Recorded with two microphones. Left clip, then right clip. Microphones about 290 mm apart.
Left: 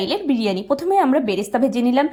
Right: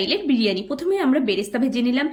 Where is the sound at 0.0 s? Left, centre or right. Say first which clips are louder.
Even; centre.